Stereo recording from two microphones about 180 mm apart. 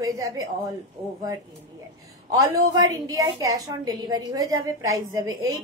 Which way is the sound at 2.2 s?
20° right (ahead or behind).